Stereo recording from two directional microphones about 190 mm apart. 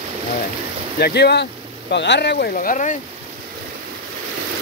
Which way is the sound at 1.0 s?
60° left (ahead or behind).